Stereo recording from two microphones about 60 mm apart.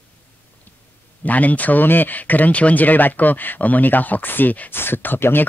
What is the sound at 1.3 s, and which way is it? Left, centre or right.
Speech, left.